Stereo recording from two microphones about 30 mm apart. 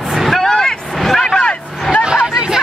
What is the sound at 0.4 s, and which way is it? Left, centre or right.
Vehicle, centre.